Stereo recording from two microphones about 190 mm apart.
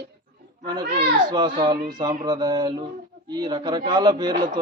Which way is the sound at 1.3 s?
25° right (ahead or behind).